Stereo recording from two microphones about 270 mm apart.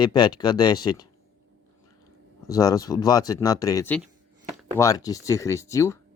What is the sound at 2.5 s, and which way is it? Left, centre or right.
Speech, centre.